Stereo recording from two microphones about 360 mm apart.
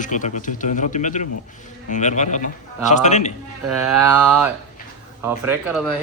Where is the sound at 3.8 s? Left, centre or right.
Centre.